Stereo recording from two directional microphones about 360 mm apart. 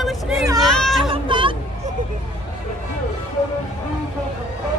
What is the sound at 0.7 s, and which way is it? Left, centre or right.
Chatter, centre.